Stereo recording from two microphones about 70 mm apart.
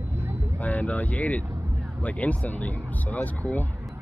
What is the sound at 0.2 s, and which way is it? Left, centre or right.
Vehicle, right.